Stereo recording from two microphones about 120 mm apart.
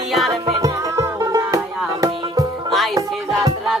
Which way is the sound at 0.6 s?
25° right (ahead or behind).